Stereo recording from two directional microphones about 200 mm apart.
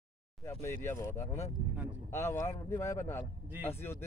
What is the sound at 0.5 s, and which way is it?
Speech, 15° left (ahead or behind).